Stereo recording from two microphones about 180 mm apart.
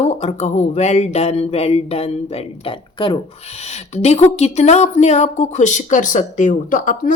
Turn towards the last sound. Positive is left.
turn(degrees=45)  # may be behind; listen again after turning